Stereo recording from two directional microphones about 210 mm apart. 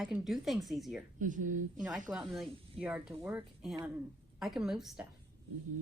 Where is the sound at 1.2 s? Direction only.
40° right (ahead or behind).